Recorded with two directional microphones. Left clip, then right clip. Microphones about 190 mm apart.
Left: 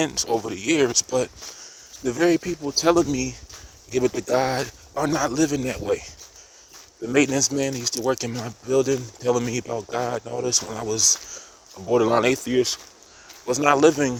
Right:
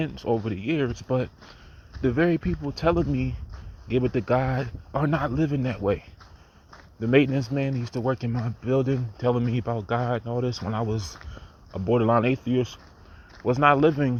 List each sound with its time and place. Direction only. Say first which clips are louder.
0.0 s speech: left 4 dB; 45° left (ahead or behind)
7.1 s speech: left 1 dB; 35° left (ahead or behind)